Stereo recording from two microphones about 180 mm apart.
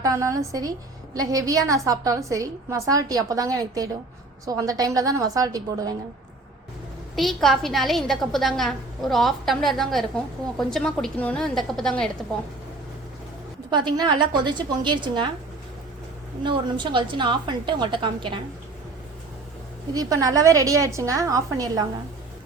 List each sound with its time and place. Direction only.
0.0 s a woman's voice: 20° right (ahead or behind)
7.2 s a woman's voice: centre (ahead or behind)
13.7 s a woman's voice: 25° right (ahead or behind)
16.4 s a woman's voice: 25° right (ahead or behind)
19.9 s a woman's voice: 20° right (ahead or behind)